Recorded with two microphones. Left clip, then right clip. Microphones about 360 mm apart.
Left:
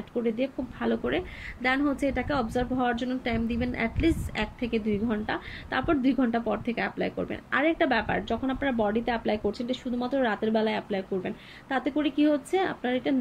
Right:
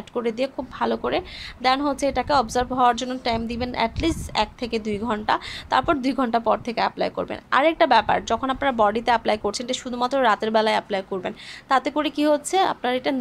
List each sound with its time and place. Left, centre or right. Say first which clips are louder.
0.2 s a woman's voice: right 4 dB; centre
9.4 s speech: right 4 dB; right
10.0 s a woman's voice: right 8 dB; centre